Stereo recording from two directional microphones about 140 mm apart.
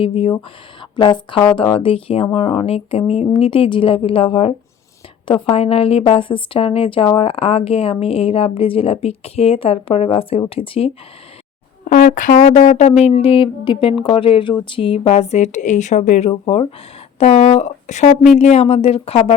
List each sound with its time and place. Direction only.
0.0 s a woman's voice: 40° left (ahead or behind)
11.9 s speech: 85° left
12.4 s a woman's voice: 50° left (ahead or behind)
16.3 s a woman's voice: 40° left (ahead or behind)